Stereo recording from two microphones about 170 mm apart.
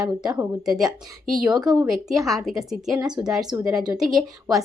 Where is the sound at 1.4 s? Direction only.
25° right (ahead or behind).